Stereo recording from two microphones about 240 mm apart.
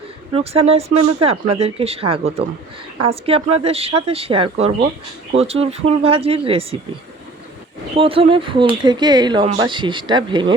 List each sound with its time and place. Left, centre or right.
0.3 s speech: right
7.9 s speech: right